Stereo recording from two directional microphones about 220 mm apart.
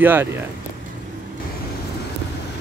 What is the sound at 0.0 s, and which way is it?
Speech, 10° right (ahead or behind).